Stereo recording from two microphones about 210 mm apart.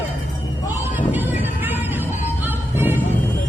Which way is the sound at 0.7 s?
10° right (ahead or behind).